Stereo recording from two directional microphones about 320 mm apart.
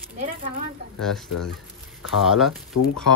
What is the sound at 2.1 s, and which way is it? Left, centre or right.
Speech, centre.